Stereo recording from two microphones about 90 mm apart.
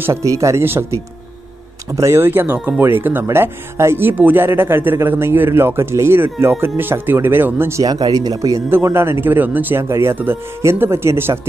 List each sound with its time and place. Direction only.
0.0 s speech: 35° right (ahead or behind)
7.8 s speech: 45° right (ahead or behind)
8.6 s speech: 25° right (ahead or behind)